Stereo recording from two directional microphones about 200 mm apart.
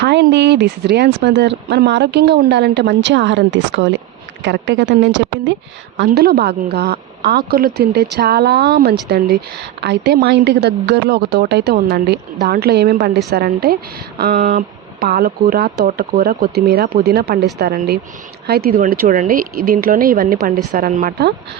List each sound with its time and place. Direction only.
0.0 s speech: 60° right (ahead or behind)
6.1 s a woman's voice: 50° right (ahead or behind)